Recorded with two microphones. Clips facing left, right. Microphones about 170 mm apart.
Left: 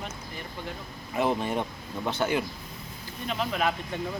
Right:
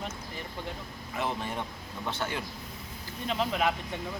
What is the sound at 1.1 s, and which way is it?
Speech, 20° left (ahead or behind).